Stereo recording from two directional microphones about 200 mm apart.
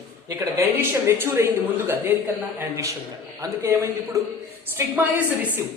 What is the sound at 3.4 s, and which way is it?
Speech, 15° right (ahead or behind).